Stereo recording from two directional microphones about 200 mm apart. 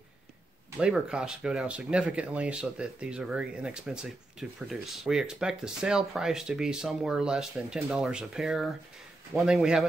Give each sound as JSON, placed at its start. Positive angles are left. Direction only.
{"t": 0.7, "sound": "speech", "side_deg": -5}